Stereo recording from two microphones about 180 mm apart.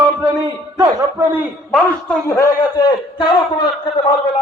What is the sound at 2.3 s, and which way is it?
A man's voice, 20° left (ahead or behind).